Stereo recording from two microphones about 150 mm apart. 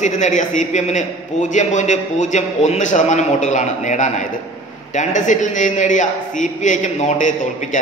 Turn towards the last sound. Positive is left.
turn(degrees=55)  # may be behind; listen again after turning